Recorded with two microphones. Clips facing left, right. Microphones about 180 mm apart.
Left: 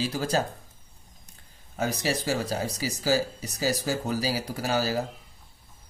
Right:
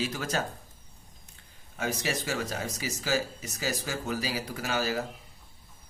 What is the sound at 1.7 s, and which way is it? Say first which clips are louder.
Speech: left 4 dB; 35° left (ahead or behind).